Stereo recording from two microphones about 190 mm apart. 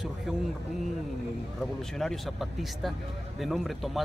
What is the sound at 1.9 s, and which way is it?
Speech, centre (ahead or behind).